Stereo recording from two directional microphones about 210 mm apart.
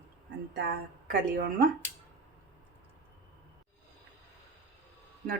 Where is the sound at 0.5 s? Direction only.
45° right (ahead or behind).